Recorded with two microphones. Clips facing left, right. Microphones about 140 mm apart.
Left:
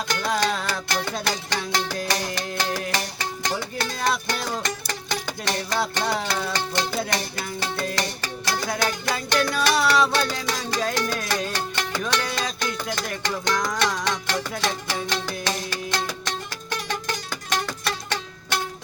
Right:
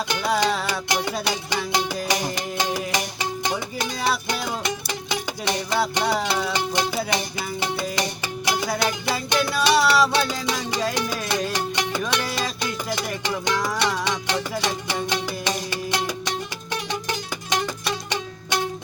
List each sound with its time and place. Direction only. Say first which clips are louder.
0.1 s music: right 2 dB; 15° right (ahead or behind)
17.5 s music: right 2 dB; 15° right (ahead or behind)